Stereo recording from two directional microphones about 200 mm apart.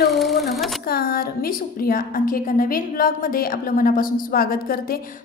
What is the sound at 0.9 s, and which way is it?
A woman's voice, 50° left (ahead or behind).